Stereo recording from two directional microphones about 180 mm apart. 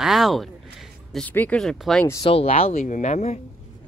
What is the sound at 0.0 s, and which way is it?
Speech, centre (ahead or behind).